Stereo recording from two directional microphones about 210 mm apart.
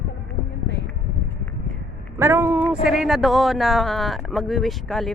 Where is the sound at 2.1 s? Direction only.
10° right (ahead or behind).